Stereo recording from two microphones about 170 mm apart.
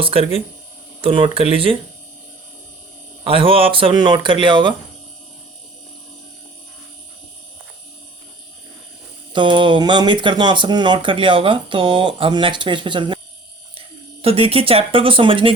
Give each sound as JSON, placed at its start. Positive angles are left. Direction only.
{"t": 0.0, "sound": "speech", "side_deg": -35}
{"t": 3.2, "sound": "speech", "side_deg": -35}
{"t": 9.3, "sound": "speech", "side_deg": -30}